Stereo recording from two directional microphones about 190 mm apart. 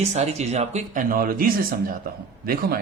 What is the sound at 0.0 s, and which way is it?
Speech, 35° right (ahead or behind).